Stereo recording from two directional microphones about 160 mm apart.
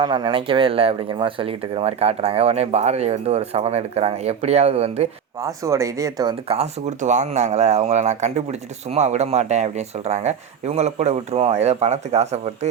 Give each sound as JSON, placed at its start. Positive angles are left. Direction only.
{"t": 0.0, "sound": "speech", "side_deg": -30}
{"t": 5.4, "sound": "speech", "side_deg": -20}
{"t": 6.5, "sound": "speech", "side_deg": -45}